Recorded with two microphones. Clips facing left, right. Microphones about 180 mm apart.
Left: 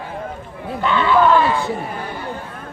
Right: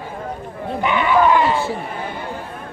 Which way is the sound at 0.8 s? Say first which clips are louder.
Left 1 dB; 15° right (ahead or behind).